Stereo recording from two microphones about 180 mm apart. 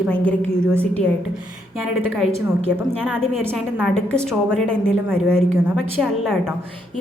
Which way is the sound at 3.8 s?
5° left (ahead or behind).